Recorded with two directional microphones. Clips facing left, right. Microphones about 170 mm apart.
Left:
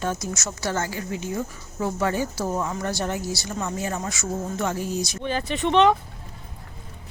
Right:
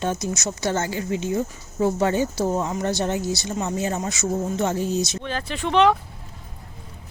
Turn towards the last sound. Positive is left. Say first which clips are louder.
# even
turn(degrees=0)  # may be behind; listen again after turning